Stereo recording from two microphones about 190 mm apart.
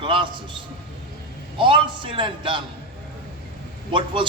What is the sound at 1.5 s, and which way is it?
A man's voice, 25° right (ahead or behind).